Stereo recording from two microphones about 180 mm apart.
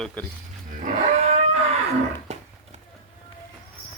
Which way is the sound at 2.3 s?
40° right (ahead or behind).